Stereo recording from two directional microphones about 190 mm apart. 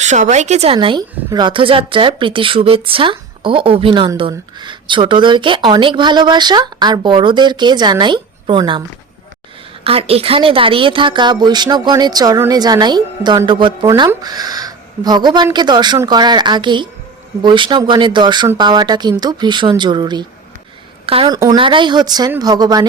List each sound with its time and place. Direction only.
0.0 s speech: 40° right (ahead or behind)
9.8 s speech: 30° right (ahead or behind)